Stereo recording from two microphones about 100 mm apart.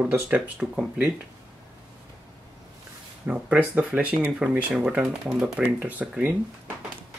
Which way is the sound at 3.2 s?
15° right (ahead or behind).